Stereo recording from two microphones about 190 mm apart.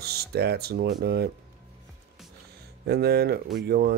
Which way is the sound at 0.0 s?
55° right (ahead or behind).